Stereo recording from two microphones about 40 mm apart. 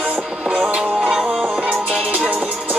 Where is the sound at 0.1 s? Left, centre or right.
Right.